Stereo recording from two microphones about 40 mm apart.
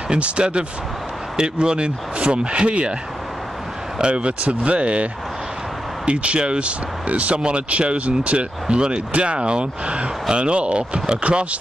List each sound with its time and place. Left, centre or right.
0.1 s speech: right
4.0 s speech: right